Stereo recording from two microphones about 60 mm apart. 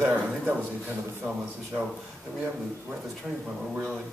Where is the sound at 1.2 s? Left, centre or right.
Right.